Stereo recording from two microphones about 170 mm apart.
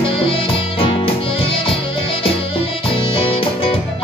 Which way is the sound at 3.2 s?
35° left (ahead or behind).